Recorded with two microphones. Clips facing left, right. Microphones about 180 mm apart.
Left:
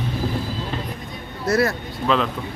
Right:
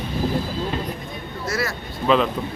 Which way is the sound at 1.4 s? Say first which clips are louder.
Left 7 dB; 55° left (ahead or behind).